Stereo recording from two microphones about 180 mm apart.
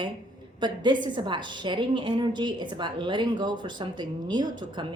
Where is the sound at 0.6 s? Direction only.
25° right (ahead or behind).